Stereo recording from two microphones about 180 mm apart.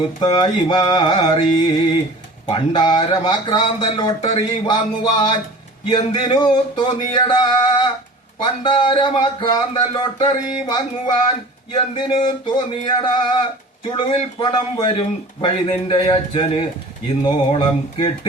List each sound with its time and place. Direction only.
0.3 s speech: 25° left (ahead or behind)